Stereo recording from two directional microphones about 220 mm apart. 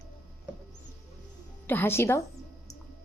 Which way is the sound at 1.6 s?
10° left (ahead or behind).